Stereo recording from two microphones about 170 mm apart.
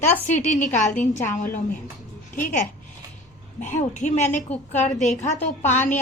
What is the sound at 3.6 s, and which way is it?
A woman's voice, 45° left (ahead or behind).